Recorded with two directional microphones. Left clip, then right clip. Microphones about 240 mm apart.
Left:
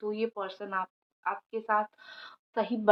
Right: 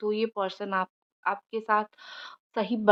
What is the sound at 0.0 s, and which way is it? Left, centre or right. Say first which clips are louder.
Speech: right 5 dB; right.